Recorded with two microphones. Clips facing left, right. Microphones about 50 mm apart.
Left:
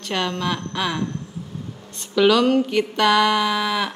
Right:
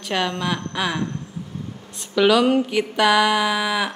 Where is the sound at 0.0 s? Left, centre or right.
Centre.